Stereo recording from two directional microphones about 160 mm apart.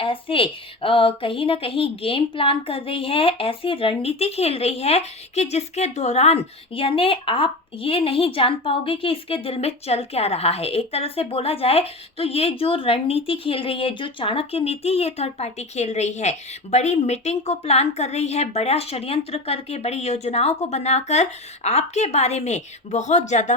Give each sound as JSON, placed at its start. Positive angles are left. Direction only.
{"t": 0.0, "sound": "speech", "side_deg": 35}